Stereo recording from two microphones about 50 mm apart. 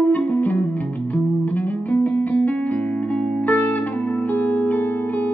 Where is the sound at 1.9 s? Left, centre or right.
Left.